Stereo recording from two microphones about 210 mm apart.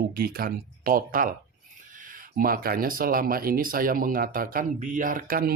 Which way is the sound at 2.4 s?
45° right (ahead or behind).